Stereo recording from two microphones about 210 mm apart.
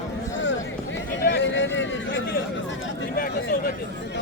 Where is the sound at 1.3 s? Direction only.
60° left (ahead or behind).